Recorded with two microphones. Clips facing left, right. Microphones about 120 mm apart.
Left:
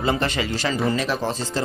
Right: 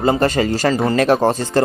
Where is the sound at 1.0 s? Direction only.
55° right (ahead or behind).